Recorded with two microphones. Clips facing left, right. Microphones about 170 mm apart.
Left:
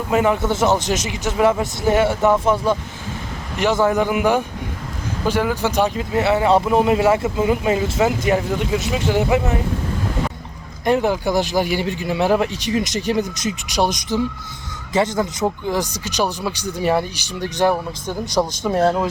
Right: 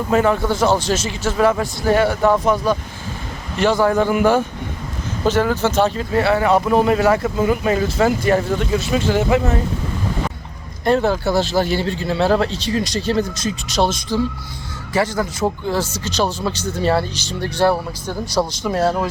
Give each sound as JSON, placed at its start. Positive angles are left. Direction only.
{"t": 0.1, "sound": "a man's voice", "side_deg": 15}
{"t": 10.8, "sound": "a man's voice", "side_deg": 15}